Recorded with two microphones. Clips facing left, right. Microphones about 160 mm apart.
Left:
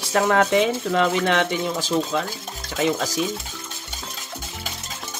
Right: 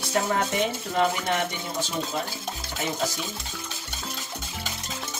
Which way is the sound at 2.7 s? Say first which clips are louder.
Left 7 dB; 90° left.